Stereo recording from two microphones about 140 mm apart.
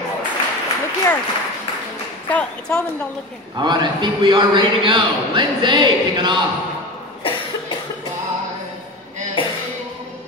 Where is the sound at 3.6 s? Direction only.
30° right (ahead or behind).